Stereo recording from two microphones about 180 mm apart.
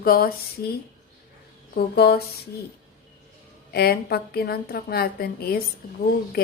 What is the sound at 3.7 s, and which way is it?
A woman's voice, 60° left (ahead or behind).